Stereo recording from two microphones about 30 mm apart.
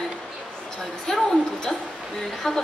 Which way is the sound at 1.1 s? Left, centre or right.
Centre.